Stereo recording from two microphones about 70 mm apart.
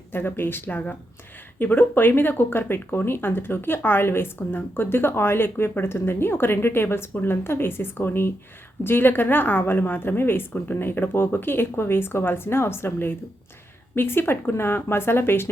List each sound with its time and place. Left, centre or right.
0.1 s speech: left